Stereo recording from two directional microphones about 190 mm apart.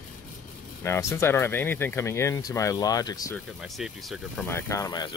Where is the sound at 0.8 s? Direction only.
15° left (ahead or behind).